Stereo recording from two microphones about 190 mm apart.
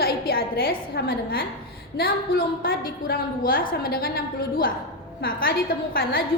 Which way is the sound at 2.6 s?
50° left (ahead or behind).